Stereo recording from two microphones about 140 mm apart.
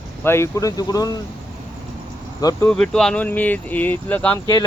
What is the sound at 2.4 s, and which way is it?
Speech, 25° left (ahead or behind).